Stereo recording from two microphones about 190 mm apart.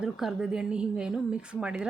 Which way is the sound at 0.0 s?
5° right (ahead or behind).